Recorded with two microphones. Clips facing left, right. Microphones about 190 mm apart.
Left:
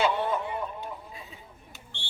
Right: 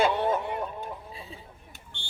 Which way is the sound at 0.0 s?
55° right (ahead or behind).